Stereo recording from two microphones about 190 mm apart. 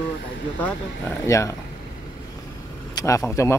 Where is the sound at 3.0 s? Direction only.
15° left (ahead or behind).